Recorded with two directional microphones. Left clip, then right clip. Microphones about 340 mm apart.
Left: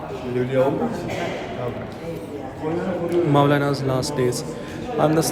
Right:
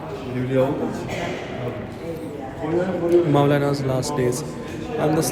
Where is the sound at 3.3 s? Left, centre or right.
Centre.